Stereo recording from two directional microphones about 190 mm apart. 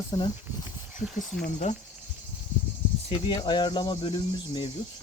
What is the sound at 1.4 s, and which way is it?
Speech, 40° left (ahead or behind).